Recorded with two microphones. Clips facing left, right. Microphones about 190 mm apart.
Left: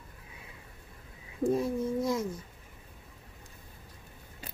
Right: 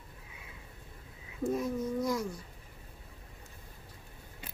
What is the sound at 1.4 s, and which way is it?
Speech, 30° left (ahead or behind).